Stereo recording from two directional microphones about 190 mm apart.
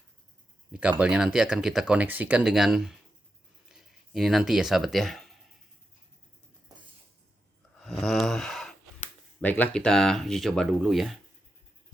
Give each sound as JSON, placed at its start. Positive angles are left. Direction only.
{"t": 0.7, "sound": "speech", "side_deg": -5}
{"t": 7.8, "sound": "a sound", "side_deg": 0}
{"t": 9.4, "sound": "speech", "side_deg": 10}